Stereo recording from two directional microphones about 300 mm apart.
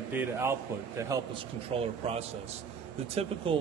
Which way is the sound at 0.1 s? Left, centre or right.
Centre.